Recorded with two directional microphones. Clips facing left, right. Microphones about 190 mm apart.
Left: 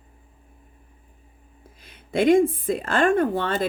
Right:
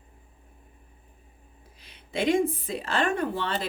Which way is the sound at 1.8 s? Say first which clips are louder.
Left 7 dB; 50° left (ahead or behind).